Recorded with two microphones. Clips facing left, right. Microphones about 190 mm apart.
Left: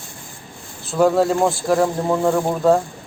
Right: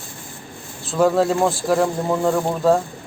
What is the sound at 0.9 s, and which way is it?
Speech, centre (ahead or behind).